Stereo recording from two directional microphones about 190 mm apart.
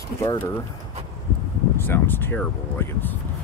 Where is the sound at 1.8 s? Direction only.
10° left (ahead or behind).